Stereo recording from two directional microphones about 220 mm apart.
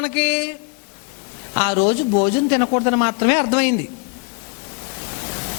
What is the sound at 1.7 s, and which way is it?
Speech, 30° left (ahead or behind).